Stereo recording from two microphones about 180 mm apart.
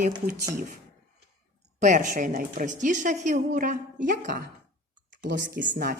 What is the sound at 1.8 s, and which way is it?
A woman's voice, 45° right (ahead or behind).